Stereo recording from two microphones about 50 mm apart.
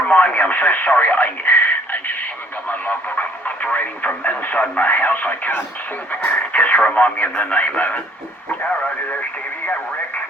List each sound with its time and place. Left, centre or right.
0.1 s speech: left